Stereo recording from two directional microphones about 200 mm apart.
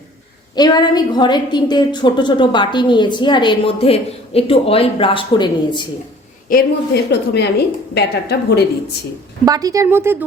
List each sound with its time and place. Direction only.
0.5 s a woman's voice: 20° left (ahead or behind)
6.5 s a woman's voice: 55° left (ahead or behind)
9.5 s speech: 20° right (ahead or behind)